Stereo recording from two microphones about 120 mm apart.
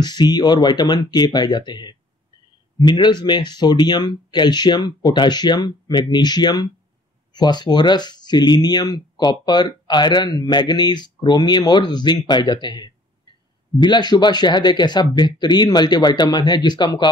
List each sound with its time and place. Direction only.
0.0 s speech: 35° left (ahead or behind)